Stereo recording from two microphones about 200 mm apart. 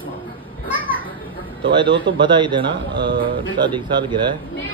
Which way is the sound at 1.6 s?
25° right (ahead or behind).